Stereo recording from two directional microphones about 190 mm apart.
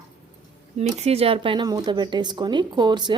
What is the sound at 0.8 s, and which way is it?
A woman's voice, 35° right (ahead or behind).